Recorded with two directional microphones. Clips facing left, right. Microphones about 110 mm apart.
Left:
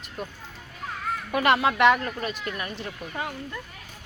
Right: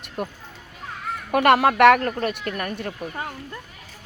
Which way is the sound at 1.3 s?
55° right (ahead or behind).